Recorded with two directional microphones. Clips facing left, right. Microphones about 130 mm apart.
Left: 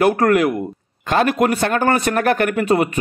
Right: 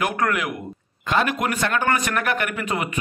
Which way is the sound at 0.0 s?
40° left (ahead or behind).